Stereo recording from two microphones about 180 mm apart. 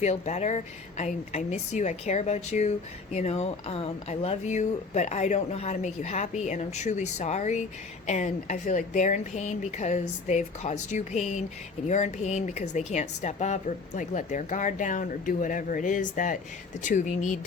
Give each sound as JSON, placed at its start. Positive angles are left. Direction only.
{"t": 0.0, "sound": "a woman's voice", "side_deg": 40}